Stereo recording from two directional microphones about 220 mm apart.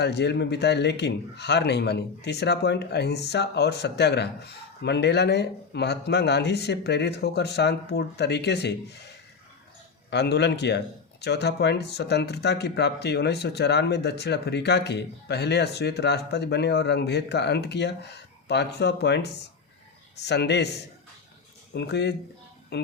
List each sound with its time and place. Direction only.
0.0 s speech: 50° left (ahead or behind)
10.1 s speech: 50° left (ahead or behind)
21.7 s speech: 50° left (ahead or behind)